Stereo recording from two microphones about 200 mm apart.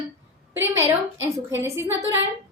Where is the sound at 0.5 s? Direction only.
15° right (ahead or behind).